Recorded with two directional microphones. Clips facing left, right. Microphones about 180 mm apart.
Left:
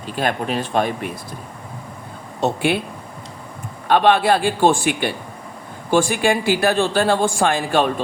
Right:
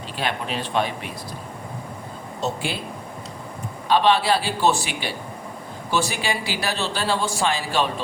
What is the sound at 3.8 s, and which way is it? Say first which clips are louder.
Speech: left 4 dB; 55° left (ahead or behind).